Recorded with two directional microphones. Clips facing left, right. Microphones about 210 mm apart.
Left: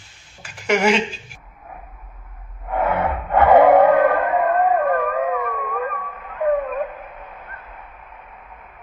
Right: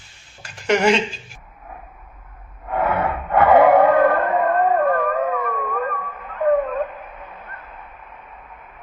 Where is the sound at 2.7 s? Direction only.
20° left (ahead or behind).